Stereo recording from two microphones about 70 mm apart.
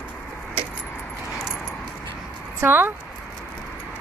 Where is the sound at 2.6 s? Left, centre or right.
Right.